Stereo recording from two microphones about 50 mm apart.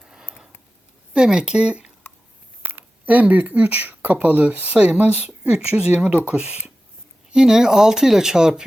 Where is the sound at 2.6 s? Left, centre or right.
Right.